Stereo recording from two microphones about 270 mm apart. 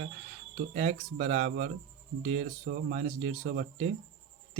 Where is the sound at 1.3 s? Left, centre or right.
Right.